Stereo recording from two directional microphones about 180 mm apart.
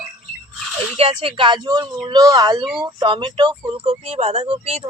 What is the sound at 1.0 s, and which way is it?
Speech, 35° right (ahead or behind).